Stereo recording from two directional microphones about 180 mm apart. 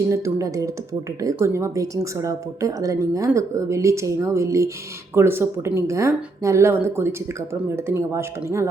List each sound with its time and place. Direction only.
0.1 s a woman's voice: 15° right (ahead or behind)